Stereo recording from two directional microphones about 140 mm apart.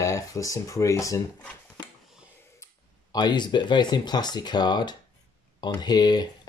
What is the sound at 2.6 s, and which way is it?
Speech, 30° left (ahead or behind).